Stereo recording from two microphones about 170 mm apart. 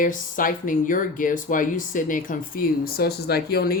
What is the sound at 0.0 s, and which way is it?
Speech, 50° left (ahead or behind).